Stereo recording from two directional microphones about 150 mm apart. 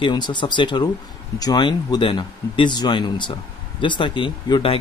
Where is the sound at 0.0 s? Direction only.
30° left (ahead or behind).